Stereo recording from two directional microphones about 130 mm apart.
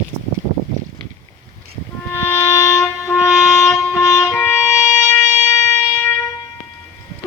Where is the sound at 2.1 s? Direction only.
15° left (ahead or behind).